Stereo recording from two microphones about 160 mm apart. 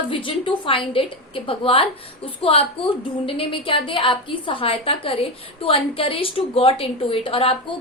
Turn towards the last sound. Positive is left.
turn(degrees=35)  # may be behind; listen again after turning